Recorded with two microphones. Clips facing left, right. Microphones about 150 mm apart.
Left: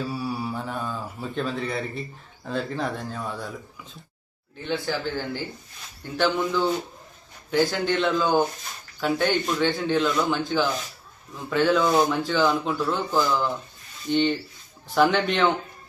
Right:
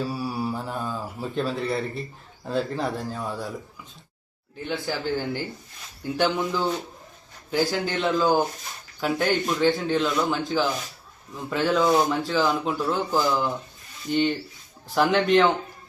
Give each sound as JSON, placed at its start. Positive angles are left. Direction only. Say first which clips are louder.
{"t": 0.0, "sound": "mantra", "louder": "right 1 dB", "side_deg": 0}
{"t": 2.5, "sound": "speech", "louder": "right 2 dB", "side_deg": 0}
{"t": 6.3, "sound": "speech", "louder": "left 2 dB", "side_deg": 0}
{"t": 13.2, "sound": "speech", "louder": "right 1 dB", "side_deg": -20}
{"t": 14.0, "sound": "speech", "louder": "left 1 dB", "side_deg": 0}